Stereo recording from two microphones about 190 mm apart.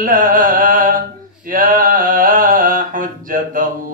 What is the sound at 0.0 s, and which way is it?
Music, 45° right (ahead or behind).